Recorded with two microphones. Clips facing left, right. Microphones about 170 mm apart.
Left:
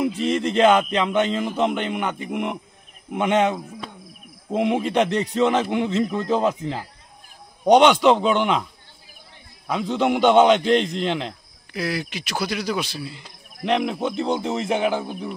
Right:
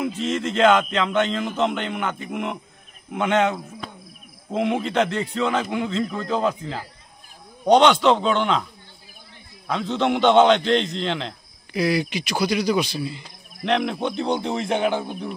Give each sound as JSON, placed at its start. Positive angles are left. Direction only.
{"t": 0.0, "sound": "a man's voice", "side_deg": 10}
{"t": 9.7, "sound": "a man's voice", "side_deg": 10}